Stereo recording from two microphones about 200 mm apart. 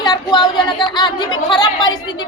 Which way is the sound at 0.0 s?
20° left (ahead or behind).